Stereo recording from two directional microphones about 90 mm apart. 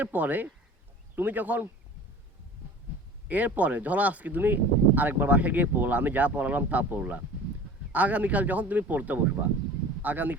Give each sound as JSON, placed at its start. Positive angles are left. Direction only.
{"t": 0.0, "sound": "speech", "side_deg": -20}
{"t": 3.2, "sound": "speech", "side_deg": -15}